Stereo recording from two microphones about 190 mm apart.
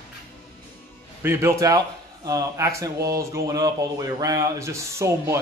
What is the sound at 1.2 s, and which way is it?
Speech, 15° right (ahead or behind).